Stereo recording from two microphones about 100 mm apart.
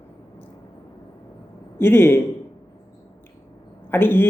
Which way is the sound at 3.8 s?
20° left (ahead or behind).